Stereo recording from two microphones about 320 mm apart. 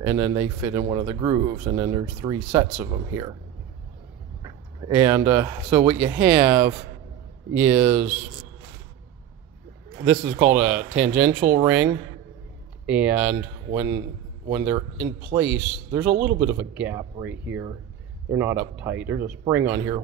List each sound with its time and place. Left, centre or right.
0.0 s speech: centre
4.4 s speech: centre
10.0 s speech: centre
14.5 s speech: centre